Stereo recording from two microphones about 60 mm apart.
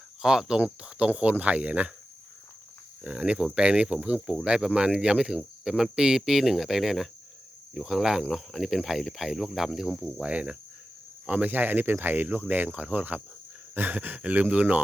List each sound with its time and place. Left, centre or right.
0.2 s speech: centre
3.0 s speech: centre
10.2 s speech: centre